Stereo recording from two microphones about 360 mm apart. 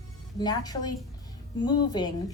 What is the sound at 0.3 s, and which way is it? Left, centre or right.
A woman's voice, centre.